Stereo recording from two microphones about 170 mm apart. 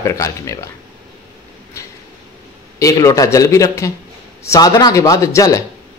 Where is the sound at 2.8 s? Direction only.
20° left (ahead or behind).